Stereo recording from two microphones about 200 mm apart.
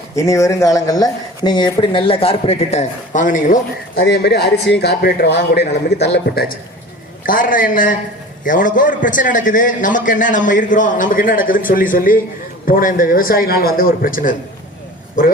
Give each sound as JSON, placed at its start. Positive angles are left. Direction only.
{"t": 0.2, "sound": "speech", "side_deg": 15}
{"t": 3.9, "sound": "a man's voice", "side_deg": 60}